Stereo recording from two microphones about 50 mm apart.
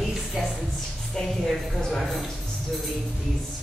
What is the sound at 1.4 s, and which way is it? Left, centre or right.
Speech, centre.